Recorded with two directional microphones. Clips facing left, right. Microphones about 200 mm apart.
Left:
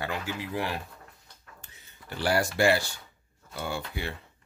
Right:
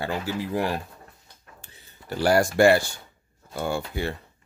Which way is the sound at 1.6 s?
30° right (ahead or behind).